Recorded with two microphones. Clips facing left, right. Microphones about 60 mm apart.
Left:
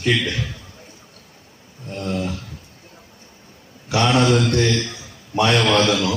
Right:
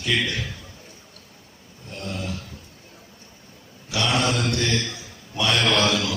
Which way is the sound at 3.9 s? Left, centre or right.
Left.